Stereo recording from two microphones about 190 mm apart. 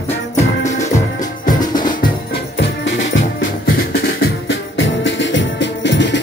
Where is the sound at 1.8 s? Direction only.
45° left (ahead or behind).